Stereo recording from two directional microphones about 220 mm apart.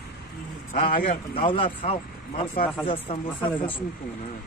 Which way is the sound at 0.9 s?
40° left (ahead or behind).